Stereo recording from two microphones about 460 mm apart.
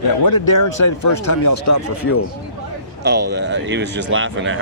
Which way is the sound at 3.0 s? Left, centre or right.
Right.